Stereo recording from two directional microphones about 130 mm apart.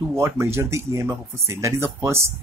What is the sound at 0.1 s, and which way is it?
Speech, 20° right (ahead or behind).